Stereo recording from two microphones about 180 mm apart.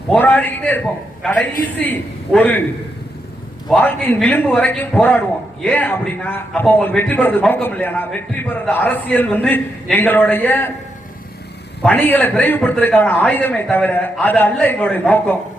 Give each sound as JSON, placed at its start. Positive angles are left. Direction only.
{"t": 0.1, "sound": "a man's voice", "side_deg": 10}
{"t": 3.7, "sound": "a man's voice", "side_deg": 10}
{"t": 11.8, "sound": "a man's voice", "side_deg": 10}